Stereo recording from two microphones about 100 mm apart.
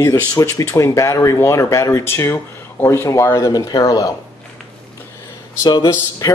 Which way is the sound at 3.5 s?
40° left (ahead or behind).